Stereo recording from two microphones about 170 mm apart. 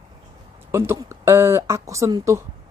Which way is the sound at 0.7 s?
15° right (ahead or behind).